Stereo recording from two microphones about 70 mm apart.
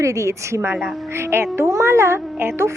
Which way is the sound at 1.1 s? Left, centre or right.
Right.